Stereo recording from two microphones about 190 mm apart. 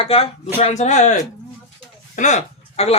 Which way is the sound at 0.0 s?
30° left (ahead or behind).